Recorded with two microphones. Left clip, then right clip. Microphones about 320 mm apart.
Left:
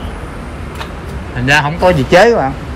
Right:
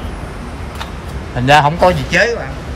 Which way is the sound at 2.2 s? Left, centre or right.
Centre.